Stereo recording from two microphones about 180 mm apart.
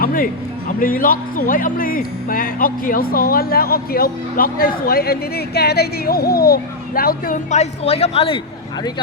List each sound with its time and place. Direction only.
0.0 s a man's voice: 50° left (ahead or behind); by 8.4 s 30° left (ahead or behind)